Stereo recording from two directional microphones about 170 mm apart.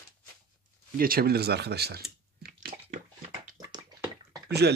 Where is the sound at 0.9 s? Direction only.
60° right (ahead or behind).